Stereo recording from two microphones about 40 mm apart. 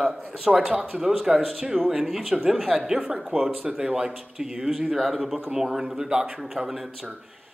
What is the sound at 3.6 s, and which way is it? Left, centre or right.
Speech, right.